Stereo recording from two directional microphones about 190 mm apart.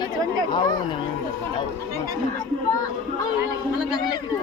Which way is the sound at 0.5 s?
25° left (ahead or behind).